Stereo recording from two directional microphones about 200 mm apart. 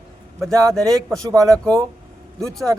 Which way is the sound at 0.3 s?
5° left (ahead or behind).